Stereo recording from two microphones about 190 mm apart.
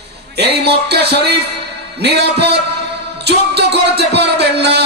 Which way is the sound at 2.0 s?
60° right (ahead or behind).